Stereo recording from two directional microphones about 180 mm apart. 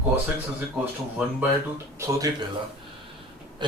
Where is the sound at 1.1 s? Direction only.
15° right (ahead or behind).